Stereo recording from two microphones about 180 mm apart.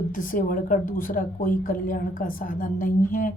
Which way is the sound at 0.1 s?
50° left (ahead or behind).